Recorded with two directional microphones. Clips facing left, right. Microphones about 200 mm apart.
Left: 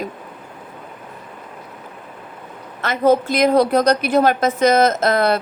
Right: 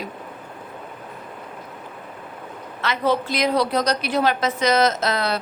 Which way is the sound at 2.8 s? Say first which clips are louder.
Left 6 dB; 45° left (ahead or behind).